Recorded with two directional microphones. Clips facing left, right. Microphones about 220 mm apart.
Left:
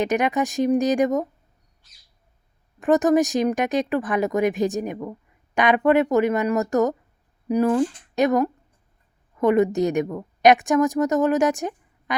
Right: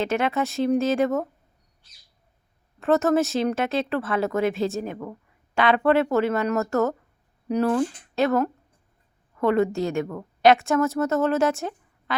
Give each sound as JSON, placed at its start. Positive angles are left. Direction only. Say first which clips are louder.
{"t": 0.0, "sound": "speech", "louder": "left 2 dB", "side_deg": 15}
{"t": 2.8, "sound": "a woman's voice", "louder": "left 3 dB", "side_deg": 15}